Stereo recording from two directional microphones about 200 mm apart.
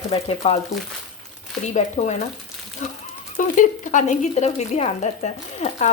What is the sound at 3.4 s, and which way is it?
Speech, 40° left (ahead or behind).